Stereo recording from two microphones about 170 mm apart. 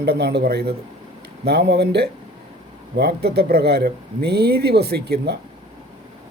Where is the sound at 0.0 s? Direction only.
70° right (ahead or behind).